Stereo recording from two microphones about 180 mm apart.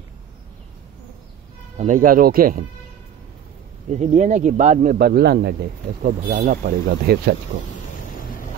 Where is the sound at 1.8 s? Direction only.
45° right (ahead or behind).